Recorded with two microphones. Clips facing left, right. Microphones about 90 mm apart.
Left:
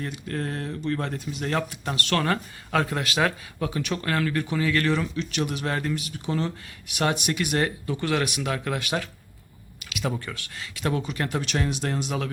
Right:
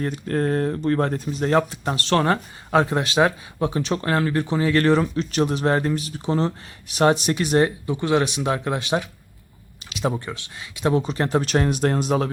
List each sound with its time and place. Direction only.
0.0 s speech: 40° right (ahead or behind)